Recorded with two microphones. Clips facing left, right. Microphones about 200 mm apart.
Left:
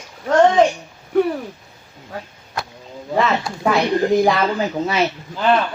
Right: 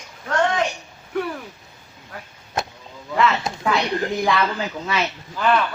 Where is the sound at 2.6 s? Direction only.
20° right (ahead or behind).